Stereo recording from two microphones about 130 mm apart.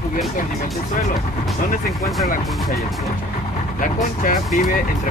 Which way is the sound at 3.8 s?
90° left.